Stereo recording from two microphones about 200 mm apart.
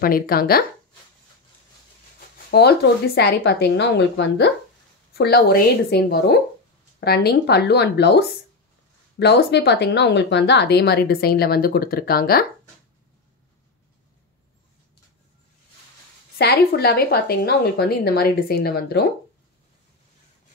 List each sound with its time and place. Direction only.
0.0 s a woman's voice: 50° left (ahead or behind)
2.1 s a woman's voice: 55° left (ahead or behind)
16.3 s a woman's voice: 55° left (ahead or behind)